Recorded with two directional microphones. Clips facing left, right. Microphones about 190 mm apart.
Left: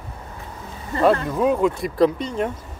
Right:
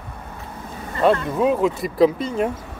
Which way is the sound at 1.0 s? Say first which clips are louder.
Even; centre (ahead or behind).